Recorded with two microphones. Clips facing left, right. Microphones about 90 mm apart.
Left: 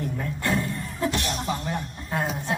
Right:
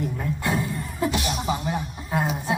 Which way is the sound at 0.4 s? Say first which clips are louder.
Left 1 dB; 5° right (ahead or behind).